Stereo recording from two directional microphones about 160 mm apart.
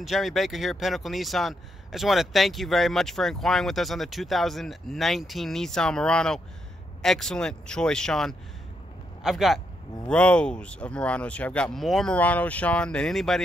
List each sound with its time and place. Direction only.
0.0 s speech: centre (ahead or behind)